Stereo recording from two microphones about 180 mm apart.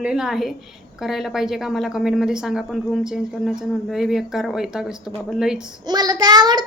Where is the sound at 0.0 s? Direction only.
5° right (ahead or behind).